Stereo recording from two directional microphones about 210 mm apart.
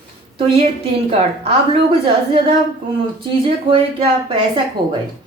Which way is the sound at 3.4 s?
25° right (ahead or behind).